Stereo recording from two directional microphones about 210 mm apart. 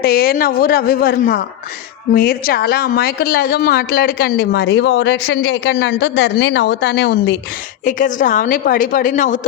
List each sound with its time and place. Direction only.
0.0 s a woman's voice: 45° left (ahead or behind)
7.9 s a woman's voice: 40° left (ahead or behind)